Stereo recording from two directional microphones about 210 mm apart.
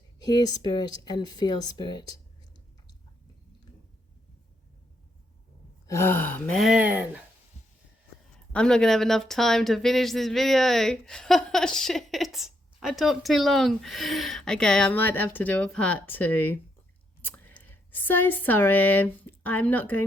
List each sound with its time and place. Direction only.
0.2 s speech: 20° left (ahead or behind)
5.9 s speech: 10° left (ahead or behind); by 7.2 s 5° right (ahead or behind)
8.5 s speech: 5° left (ahead or behind)